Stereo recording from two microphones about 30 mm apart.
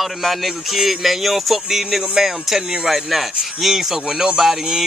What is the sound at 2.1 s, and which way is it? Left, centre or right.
Speech, centre.